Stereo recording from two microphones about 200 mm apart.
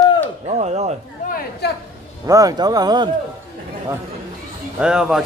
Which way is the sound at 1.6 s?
55° left (ahead or behind).